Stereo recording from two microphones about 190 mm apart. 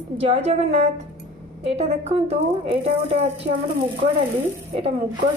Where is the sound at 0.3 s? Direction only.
35° right (ahead or behind).